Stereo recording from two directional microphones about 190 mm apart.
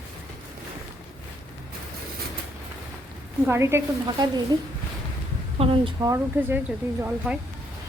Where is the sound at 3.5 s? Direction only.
15° right (ahead or behind).